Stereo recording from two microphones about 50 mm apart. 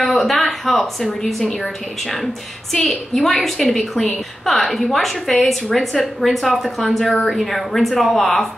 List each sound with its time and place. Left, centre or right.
0.0 s a woman's voice: centre